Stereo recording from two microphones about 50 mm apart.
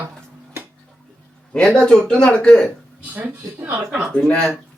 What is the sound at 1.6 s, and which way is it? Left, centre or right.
Speech, centre.